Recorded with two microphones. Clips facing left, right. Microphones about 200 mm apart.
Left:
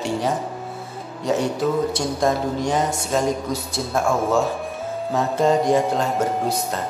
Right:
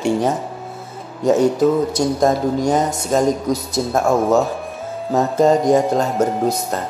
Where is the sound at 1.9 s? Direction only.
40° right (ahead or behind).